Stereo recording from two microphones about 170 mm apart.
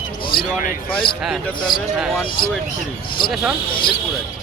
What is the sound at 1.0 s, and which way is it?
Speech, 30° left (ahead or behind).